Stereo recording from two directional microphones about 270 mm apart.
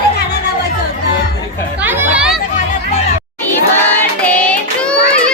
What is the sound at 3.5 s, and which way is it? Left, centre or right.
Child singing, centre.